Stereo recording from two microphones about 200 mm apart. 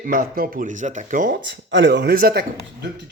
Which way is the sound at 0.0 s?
45° right (ahead or behind).